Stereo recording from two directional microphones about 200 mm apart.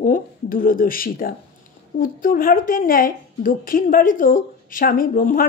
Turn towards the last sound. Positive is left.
turn(degrees=45)  # may be behind; listen again after turning